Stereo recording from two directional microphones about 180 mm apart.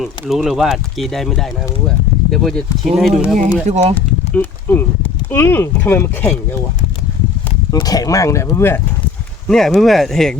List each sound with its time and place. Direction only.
0.0 s speech: centre (ahead or behind)
3.7 s speech: 35° right (ahead or behind)
4.4 s speech: 10° left (ahead or behind)
7.7 s speech: 20° left (ahead or behind)
9.5 s speech: centre (ahead or behind)